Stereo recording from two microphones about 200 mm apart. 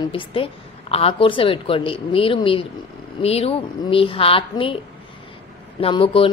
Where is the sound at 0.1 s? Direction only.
25° left (ahead or behind).